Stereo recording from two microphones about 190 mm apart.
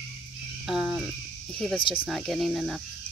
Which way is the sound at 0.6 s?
5° right (ahead or behind).